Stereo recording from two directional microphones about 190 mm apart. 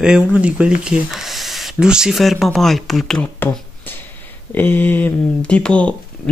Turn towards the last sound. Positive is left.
turn(degrees=5)  # may be behind; listen again after turning